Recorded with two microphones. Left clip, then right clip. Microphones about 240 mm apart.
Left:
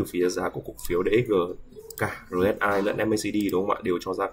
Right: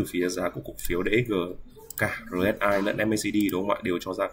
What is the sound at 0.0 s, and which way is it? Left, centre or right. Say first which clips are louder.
Speech: left 2 dB; centre.